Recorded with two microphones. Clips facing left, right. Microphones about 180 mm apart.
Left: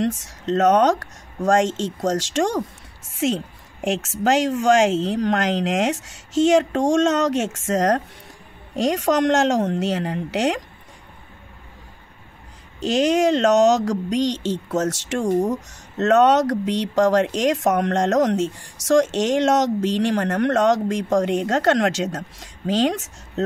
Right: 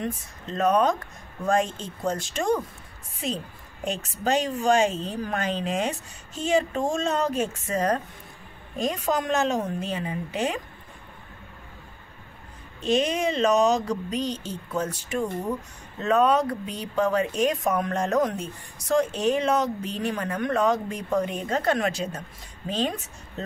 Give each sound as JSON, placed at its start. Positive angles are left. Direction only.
{"t": 0.0, "sound": "a woman's voice", "side_deg": 90}
{"t": 12.8, "sound": "speech", "side_deg": 85}